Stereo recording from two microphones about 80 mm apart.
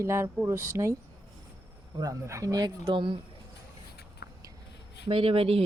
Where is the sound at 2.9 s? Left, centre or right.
Right.